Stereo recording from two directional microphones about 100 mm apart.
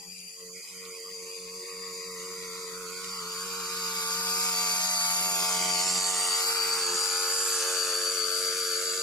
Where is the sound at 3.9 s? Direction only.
45° left (ahead or behind).